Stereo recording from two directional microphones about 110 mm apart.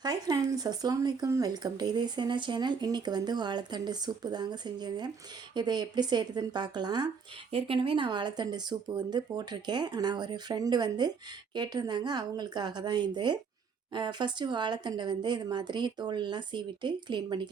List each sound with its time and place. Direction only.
0.0 s speech: 35° right (ahead or behind)
7.5 s speech: 55° right (ahead or behind)